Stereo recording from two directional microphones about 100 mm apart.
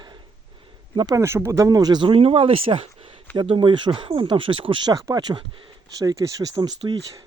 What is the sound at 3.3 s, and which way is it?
Speech, 60° right (ahead or behind).